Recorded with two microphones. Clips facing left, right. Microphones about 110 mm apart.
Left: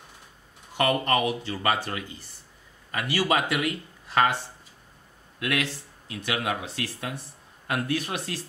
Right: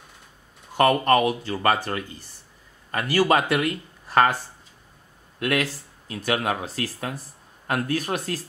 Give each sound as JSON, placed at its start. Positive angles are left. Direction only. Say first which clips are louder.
{"t": 0.7, "sound": "speech", "louder": "right 5 dB", "side_deg": -45}
{"t": 5.4, "sound": "speech", "louder": "right 4 dB", "side_deg": -45}